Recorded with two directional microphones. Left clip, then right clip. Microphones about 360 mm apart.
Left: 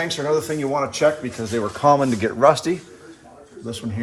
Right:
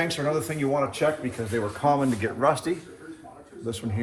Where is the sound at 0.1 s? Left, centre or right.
Centre.